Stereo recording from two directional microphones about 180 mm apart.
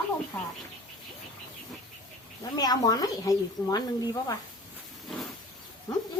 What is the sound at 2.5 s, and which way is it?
Speech, 20° left (ahead or behind).